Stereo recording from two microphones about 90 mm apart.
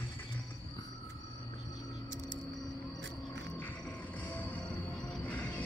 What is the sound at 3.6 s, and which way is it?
Music, 15° left (ahead or behind).